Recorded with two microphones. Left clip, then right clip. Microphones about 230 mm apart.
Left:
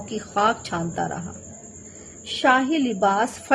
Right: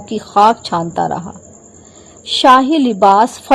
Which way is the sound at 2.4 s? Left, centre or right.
Right.